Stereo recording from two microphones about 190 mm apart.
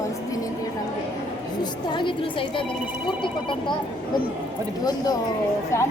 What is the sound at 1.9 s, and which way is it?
Speech, 25° left (ahead or behind).